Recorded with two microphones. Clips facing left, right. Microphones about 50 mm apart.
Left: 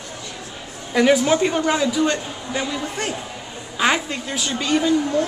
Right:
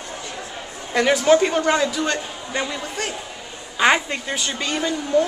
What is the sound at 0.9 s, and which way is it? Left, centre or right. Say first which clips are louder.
Speech: even; centre.